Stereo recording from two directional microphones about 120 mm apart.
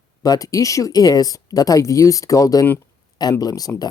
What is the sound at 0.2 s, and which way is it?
Speech, 30° left (ahead or behind).